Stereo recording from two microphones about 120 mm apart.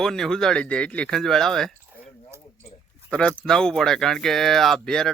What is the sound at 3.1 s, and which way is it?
Speech, 10° left (ahead or behind).